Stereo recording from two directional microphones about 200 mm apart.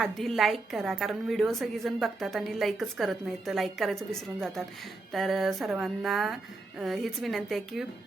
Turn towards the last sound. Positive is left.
turn(degrees=0)  # may be behind; listen again after turning